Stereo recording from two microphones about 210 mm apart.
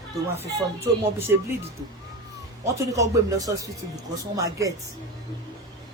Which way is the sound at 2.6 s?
15° right (ahead or behind).